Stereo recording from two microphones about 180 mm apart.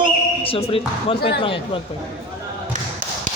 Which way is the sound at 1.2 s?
65° left (ahead or behind).